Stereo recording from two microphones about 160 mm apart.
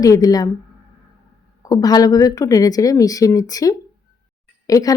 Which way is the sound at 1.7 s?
25° left (ahead or behind).